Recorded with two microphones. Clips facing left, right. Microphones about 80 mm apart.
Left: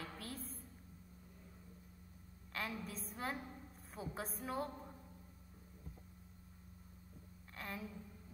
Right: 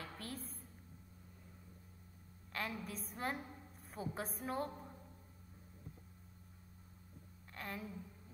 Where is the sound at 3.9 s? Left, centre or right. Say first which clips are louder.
Right 2 dB; right.